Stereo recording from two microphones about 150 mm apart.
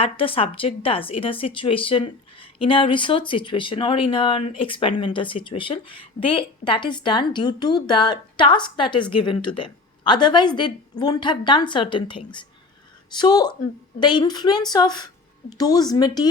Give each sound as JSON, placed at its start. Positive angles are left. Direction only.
{"t": 0.0, "sound": "a woman's voice", "side_deg": 40}